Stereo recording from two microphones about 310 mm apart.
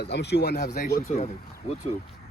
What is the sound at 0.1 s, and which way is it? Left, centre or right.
Speech, left.